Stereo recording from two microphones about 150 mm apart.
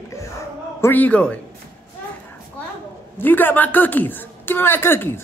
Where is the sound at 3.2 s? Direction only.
15° left (ahead or behind).